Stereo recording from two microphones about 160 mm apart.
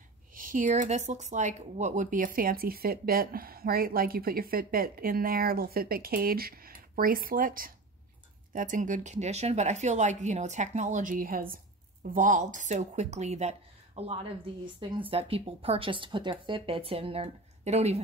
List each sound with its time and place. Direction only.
0.3 s speech: 55° right (ahead or behind); by 18.0 s 40° right (ahead or behind)